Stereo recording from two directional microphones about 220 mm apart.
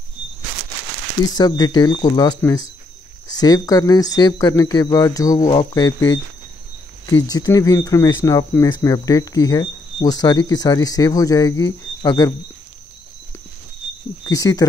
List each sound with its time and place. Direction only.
1.3 s speech: 20° left (ahead or behind)
14.2 s speech: 15° left (ahead or behind)